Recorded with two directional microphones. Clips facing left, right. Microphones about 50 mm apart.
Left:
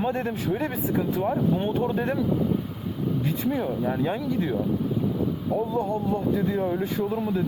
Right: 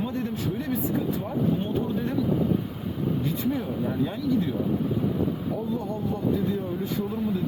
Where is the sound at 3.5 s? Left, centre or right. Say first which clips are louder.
Left 2 dB; left.